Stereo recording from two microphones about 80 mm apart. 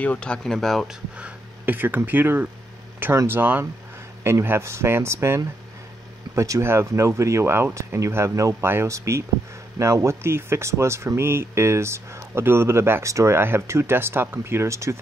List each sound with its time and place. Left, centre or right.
0.0 s speech: centre
1.1 s speech: centre; by 15.0 s right